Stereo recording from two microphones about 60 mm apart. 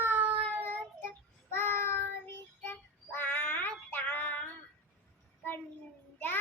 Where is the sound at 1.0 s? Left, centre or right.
Left.